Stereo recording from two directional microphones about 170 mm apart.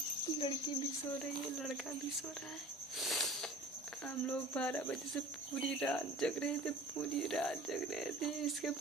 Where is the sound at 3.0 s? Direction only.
Centre (ahead or behind).